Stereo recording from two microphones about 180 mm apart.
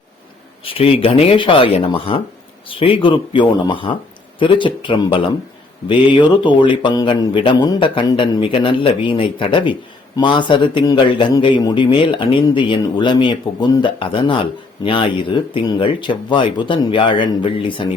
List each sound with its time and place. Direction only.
0.6 s a man's voice: 30° left (ahead or behind)